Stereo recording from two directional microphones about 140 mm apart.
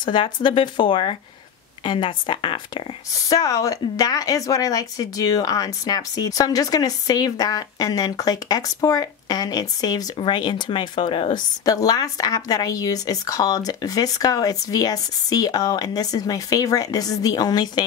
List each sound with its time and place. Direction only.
0.0 s speech: 35° left (ahead or behind)
3.2 s speech: 25° left (ahead or behind)
11.6 s speech: 25° left (ahead or behind)